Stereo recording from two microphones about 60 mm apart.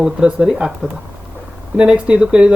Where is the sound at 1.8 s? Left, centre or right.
Centre.